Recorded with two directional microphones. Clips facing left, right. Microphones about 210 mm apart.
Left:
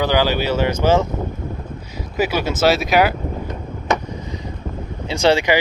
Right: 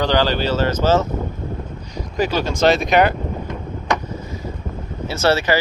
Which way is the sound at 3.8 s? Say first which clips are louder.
Left 2 dB; 20° left (ahead or behind).